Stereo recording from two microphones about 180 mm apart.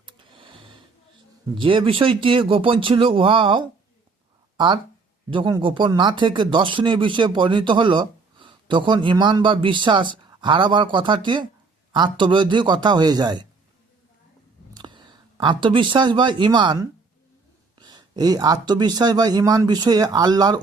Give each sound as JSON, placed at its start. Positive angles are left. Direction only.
{"t": 0.0, "sound": "a sound", "side_deg": -25}
{"t": 1.5, "sound": "speech", "side_deg": -30}
{"t": 14.7, "sound": "speech", "side_deg": -25}